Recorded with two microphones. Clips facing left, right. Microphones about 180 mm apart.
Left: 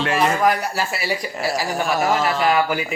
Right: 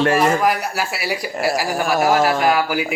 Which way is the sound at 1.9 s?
50° right (ahead or behind).